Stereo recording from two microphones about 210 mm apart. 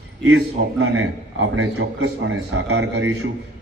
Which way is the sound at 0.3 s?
70° right (ahead or behind).